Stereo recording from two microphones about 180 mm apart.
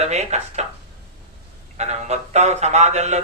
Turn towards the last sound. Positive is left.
turn(degrees=-40)  # may be behind; listen again after turning